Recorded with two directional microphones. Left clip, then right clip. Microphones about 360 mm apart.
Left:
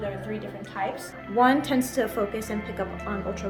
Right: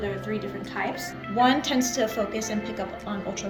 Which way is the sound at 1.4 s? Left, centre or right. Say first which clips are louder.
Left 1 dB; centre.